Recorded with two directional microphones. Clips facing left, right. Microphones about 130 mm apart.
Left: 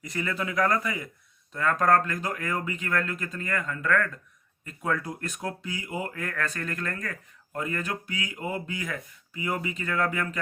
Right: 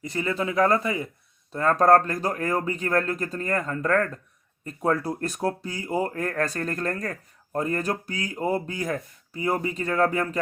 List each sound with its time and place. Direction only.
0.0 s speech: 30° right (ahead or behind)